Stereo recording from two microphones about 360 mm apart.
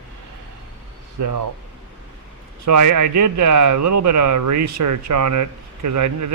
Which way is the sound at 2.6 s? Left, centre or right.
Right.